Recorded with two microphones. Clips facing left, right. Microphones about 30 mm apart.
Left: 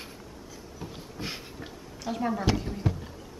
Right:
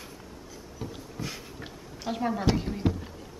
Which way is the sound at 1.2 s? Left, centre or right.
Left.